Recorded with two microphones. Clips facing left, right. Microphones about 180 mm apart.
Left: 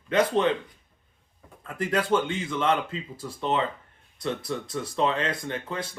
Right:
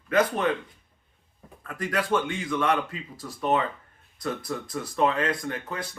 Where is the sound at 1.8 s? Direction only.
25° left (ahead or behind).